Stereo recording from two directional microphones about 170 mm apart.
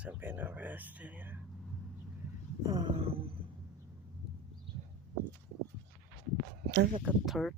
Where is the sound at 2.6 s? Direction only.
25° right (ahead or behind).